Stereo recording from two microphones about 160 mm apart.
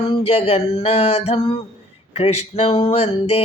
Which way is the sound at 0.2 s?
40° left (ahead or behind).